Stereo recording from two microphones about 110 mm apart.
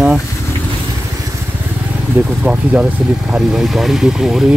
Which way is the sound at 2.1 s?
15° right (ahead or behind).